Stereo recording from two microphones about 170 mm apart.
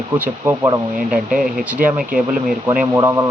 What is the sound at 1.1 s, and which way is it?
Speech, centre (ahead or behind).